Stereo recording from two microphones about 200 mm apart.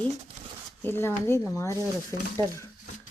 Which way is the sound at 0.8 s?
10° left (ahead or behind).